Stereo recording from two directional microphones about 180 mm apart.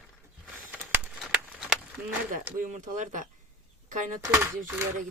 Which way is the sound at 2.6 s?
45° right (ahead or behind).